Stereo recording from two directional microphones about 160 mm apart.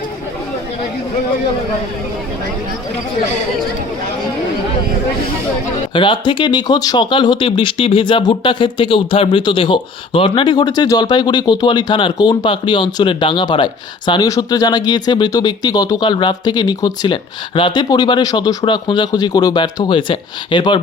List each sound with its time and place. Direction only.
5.9 s speech: 30° left (ahead or behind)